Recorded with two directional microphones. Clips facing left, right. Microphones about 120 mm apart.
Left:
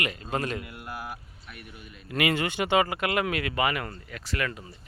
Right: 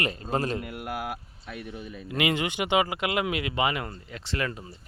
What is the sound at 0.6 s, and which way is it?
Speech, 50° right (ahead or behind).